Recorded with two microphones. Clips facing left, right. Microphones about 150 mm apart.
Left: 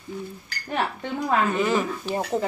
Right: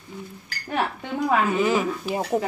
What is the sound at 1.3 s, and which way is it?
Speech, 5° right (ahead or behind).